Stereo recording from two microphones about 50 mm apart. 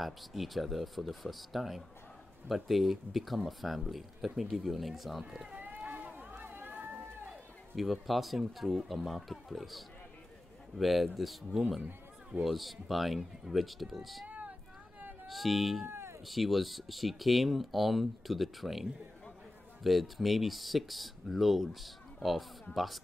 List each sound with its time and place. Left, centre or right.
0.0 s speech: centre
5.6 s run: right
7.7 s speech: centre
14.2 s a sound: right
15.2 s speech: centre
15.9 s cat: right
16.3 s speech: centre